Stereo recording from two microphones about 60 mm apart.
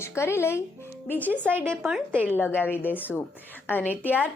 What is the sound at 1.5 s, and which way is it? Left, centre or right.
Speech, right.